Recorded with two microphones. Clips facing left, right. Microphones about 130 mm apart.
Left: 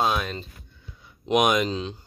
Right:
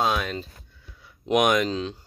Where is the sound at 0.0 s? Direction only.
Centre (ahead or behind).